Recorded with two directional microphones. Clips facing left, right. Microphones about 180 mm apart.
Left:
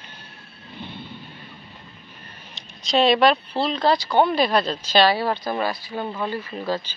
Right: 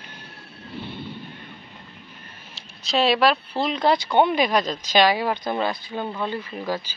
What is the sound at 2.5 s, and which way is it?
Speech, 5° right (ahead or behind).